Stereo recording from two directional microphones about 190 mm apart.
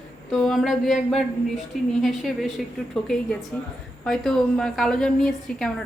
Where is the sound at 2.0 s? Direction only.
Centre (ahead or behind).